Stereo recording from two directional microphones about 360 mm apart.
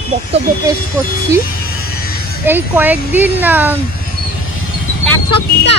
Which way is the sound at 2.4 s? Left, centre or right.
Centre.